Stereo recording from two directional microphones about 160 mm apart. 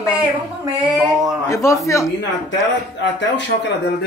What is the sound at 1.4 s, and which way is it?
Speech, 20° left (ahead or behind).